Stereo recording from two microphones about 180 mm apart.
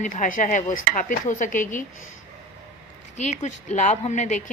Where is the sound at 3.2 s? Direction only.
40° left (ahead or behind).